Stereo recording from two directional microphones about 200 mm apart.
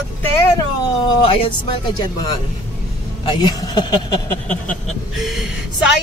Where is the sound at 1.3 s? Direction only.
25° left (ahead or behind).